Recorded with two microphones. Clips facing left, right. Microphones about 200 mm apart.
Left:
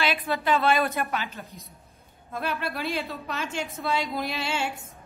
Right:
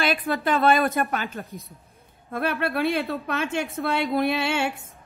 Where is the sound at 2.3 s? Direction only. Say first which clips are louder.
Right 5 dB; 55° right (ahead or behind).